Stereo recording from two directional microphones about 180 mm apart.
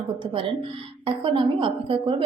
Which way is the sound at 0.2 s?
30° right (ahead or behind).